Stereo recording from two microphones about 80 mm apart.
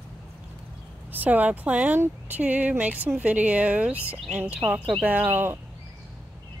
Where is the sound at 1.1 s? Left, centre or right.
Right.